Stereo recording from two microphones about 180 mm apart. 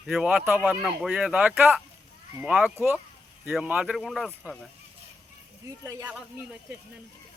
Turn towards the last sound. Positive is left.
turn(degrees=-15)  # may be behind; listen again after turning